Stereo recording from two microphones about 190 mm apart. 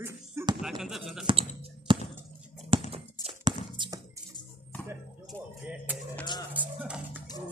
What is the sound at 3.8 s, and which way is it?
Music, 25° right (ahead or behind).